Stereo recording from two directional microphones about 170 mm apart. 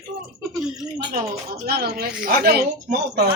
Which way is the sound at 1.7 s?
65° right (ahead or behind).